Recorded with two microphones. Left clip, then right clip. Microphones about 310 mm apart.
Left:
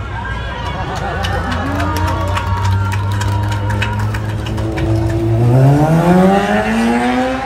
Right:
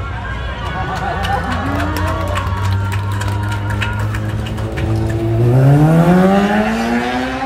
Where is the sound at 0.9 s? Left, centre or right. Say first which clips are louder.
Right 3 dB; centre.